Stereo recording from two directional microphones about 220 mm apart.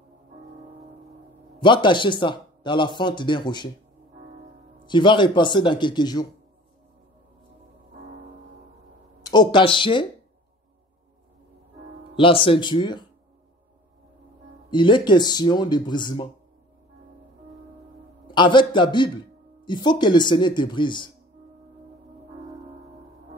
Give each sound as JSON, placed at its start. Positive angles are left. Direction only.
{"t": 1.6, "sound": "a man's voice", "side_deg": 20}
{"t": 4.8, "sound": "speech", "side_deg": 20}
{"t": 9.2, "sound": "speech", "side_deg": 20}
{"t": 12.2, "sound": "speech", "side_deg": 25}
{"t": 14.7, "sound": "speech", "side_deg": 20}
{"t": 18.2, "sound": "a man's voice", "side_deg": 20}